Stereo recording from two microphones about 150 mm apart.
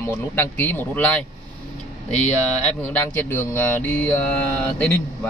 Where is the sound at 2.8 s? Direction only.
10° left (ahead or behind).